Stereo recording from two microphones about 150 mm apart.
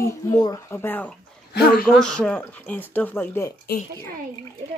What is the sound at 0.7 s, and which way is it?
Speech, 10° left (ahead or behind).